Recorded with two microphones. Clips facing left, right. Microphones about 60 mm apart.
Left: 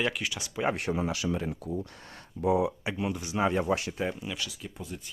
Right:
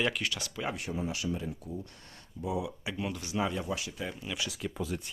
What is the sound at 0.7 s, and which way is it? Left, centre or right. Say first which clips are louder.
Speech: left 5 dB; left.